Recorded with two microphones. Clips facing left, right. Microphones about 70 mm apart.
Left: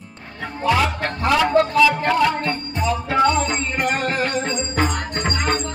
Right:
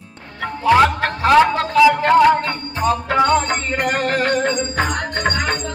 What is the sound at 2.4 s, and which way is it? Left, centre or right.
Music, right.